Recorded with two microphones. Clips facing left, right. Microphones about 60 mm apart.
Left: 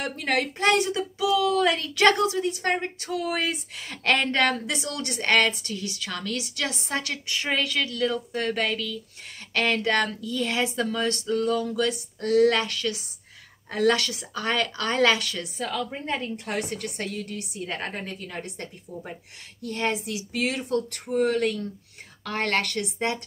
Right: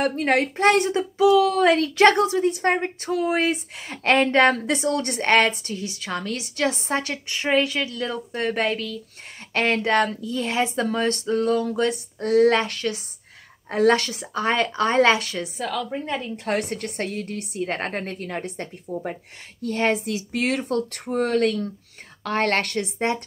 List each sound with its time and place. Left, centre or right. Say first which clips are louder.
0.0 s a woman's voice: right 6 dB; right
16.4 s a woman's voice: right 5 dB; right
19.7 s a woman's voice: right 5 dB; right
22.8 s a woman's voice: right 3 dB; right